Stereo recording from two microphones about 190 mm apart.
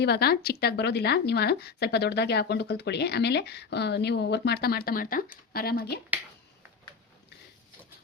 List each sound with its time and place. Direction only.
0.0 s a woman's voice: 55° left (ahead or behind)